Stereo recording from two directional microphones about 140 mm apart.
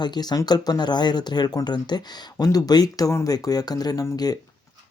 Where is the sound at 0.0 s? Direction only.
30° left (ahead or behind).